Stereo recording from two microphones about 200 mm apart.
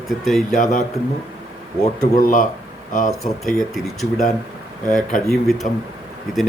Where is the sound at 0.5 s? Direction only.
40° left (ahead or behind).